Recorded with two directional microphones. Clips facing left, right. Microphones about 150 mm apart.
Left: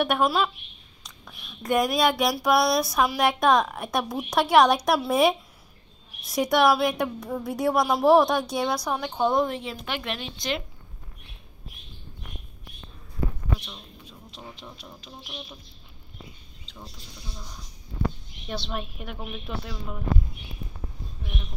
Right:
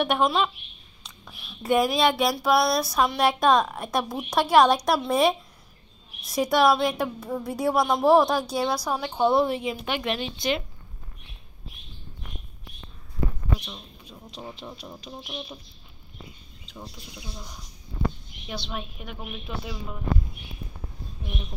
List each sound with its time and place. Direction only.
0.0 s a woman's voice: centre (ahead or behind)
14.5 s speech: 30° right (ahead or behind)
16.6 s a woman's voice: 10° right (ahead or behind)